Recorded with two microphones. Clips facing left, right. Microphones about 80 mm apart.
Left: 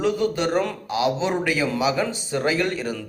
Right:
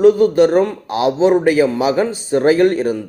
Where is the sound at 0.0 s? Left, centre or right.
Right.